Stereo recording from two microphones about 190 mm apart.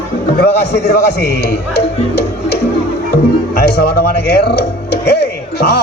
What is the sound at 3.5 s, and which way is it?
A man's voice, 55° left (ahead or behind).